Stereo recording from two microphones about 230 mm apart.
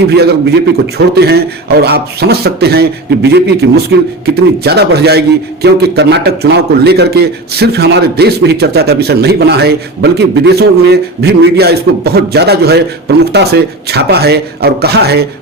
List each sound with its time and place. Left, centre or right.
0.2 s a man's voice: right